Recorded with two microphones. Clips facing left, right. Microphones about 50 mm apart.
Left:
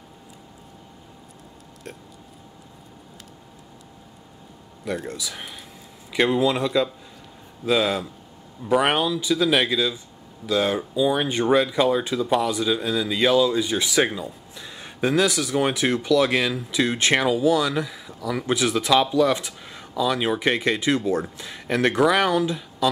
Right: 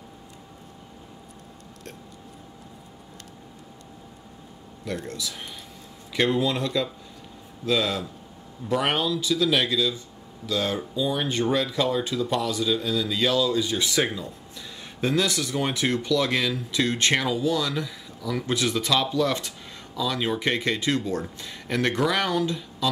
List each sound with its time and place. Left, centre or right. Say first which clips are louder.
4.9 s speech: left 1 dB; centre